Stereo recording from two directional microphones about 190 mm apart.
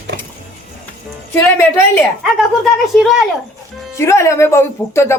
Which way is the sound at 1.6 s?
10° left (ahead or behind).